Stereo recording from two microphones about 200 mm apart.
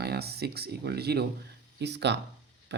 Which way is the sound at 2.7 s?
60° right (ahead or behind).